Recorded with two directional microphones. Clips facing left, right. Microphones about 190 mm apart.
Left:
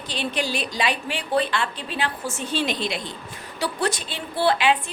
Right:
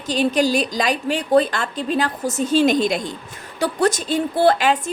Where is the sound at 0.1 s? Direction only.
45° right (ahead or behind).